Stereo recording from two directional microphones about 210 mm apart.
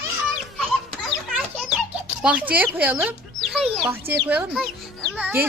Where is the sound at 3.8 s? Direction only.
10° right (ahead or behind).